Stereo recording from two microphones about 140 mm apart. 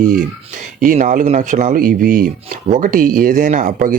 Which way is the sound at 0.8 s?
70° right (ahead or behind).